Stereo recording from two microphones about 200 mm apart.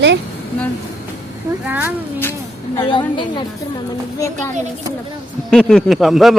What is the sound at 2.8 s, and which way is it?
A woman's voice, 25° left (ahead or behind).